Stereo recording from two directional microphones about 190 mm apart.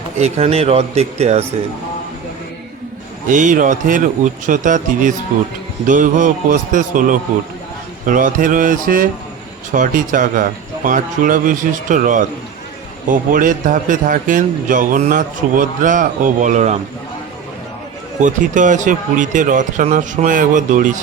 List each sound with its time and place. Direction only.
0.2 s speech: 30° right (ahead or behind)
3.2 s a man's voice: 40° right (ahead or behind)
18.2 s a man's voice: 40° right (ahead or behind)